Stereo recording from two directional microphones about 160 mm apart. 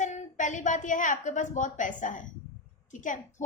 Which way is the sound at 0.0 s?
50° left (ahead or behind).